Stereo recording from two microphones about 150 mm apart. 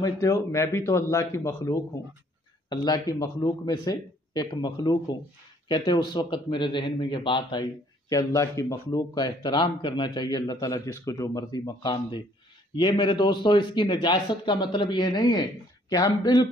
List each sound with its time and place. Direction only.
0.0 s a man's voice: 20° left (ahead or behind)
8.1 s a man's voice: 20° left (ahead or behind)